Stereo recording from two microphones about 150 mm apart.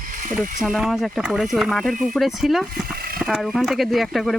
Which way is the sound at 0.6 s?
Centre (ahead or behind).